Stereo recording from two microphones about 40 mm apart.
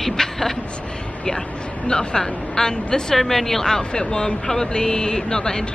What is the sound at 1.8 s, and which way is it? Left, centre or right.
A woman's voice, centre.